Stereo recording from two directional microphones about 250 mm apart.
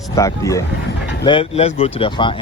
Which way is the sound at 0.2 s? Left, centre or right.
Centre.